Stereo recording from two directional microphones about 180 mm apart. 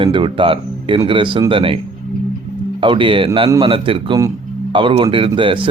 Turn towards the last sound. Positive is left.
turn(degrees=-25)  # may be behind; listen again after turning